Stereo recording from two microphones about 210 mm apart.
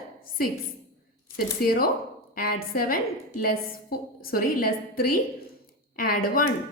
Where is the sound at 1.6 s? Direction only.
45° left (ahead or behind).